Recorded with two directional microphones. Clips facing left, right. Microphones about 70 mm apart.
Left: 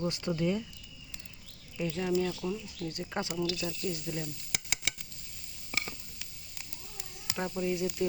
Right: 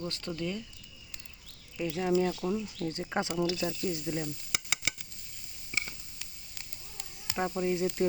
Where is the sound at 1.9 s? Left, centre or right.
Centre.